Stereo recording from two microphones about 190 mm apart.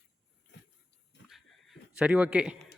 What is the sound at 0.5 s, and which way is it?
Music, 65° left (ahead or behind).